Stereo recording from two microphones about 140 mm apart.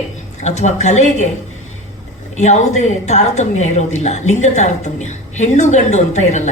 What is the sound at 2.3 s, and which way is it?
A woman's voice, 55° left (ahead or behind).